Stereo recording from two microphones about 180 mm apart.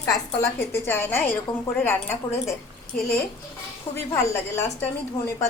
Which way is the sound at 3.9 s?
15° left (ahead or behind).